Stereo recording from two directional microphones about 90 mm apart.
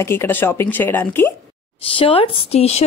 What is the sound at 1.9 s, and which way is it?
Speech, 90° left.